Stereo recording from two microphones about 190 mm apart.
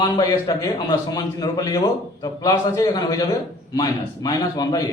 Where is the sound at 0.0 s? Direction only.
20° left (ahead or behind).